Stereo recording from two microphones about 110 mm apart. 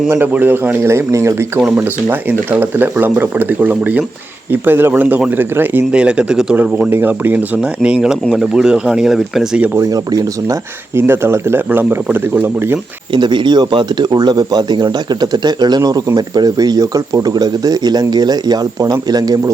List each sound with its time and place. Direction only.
0.1 s a man's voice: 15° right (ahead or behind)
9.7 s speech: 35° right (ahead or behind)
10.9 s a man's voice: 20° right (ahead or behind)
13.1 s speech: 45° right (ahead or behind)